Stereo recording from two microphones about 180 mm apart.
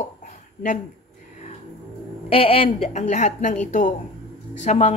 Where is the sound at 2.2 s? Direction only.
30° left (ahead or behind).